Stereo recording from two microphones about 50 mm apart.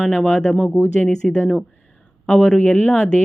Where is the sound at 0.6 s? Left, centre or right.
Left.